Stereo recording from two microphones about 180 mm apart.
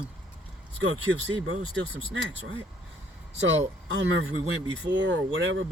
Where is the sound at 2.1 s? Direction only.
90° right.